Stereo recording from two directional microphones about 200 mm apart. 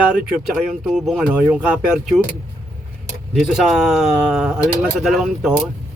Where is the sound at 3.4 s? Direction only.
Centre (ahead or behind).